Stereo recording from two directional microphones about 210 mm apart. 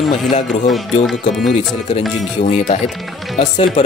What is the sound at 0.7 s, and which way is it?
Speech, centre (ahead or behind).